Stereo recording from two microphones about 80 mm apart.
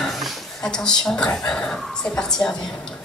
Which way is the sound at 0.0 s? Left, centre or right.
Centre.